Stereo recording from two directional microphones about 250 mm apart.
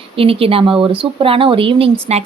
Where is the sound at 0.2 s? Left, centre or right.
Right.